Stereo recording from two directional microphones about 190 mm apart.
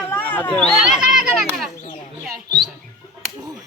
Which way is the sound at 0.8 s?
5° right (ahead or behind).